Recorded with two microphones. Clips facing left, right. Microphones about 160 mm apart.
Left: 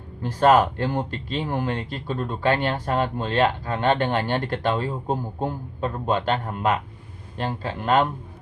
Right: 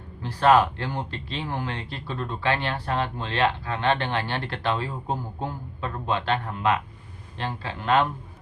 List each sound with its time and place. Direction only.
0.2 s speech: 45° left (ahead or behind)